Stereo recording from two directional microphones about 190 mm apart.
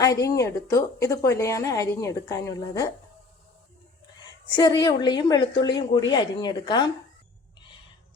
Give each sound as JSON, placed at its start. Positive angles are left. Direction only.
{"t": 0.0, "sound": "a woman's voice", "side_deg": 15}
{"t": 4.5, "sound": "a woman's voice", "side_deg": 25}